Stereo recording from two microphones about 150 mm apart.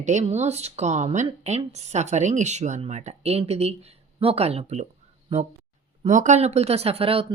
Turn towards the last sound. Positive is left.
turn(degrees=-40)  # may be behind; listen again after turning